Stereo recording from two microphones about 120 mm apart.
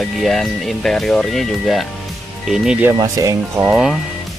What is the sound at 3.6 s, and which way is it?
Speech, 5° right (ahead or behind).